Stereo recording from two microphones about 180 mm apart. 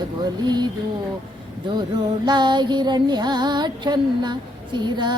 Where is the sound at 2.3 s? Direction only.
25° right (ahead or behind).